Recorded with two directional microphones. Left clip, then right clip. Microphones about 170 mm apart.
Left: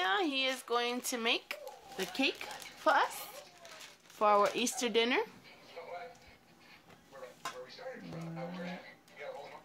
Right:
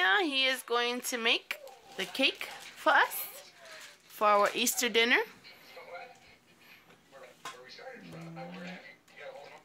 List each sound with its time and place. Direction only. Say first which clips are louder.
0.0 s speech: right 5 dB; 10° right (ahead or behind)
2.0 s speech: right 4 dB; 20° right (ahead or behind); by 5.3 s centre (ahead or behind)